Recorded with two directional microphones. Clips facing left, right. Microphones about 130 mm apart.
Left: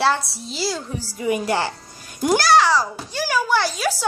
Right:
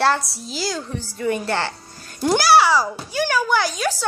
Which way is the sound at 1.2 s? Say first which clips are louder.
Left 1 dB; 10° left (ahead or behind).